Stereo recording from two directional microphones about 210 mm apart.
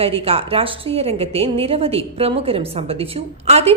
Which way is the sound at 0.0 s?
25° right (ahead or behind).